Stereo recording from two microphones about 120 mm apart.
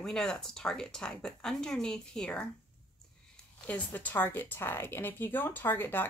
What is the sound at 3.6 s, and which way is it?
Speech, 15° left (ahead or behind).